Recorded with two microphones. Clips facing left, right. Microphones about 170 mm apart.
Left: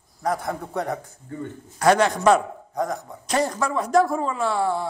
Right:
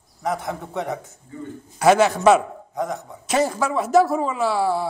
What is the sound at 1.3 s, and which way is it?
Speech, 65° left (ahead or behind).